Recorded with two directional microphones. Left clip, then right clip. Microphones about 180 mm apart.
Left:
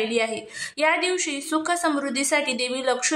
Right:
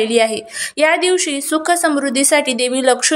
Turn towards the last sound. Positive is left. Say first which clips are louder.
# right 9 dB
turn(degrees=-25)  # may be behind; listen again after turning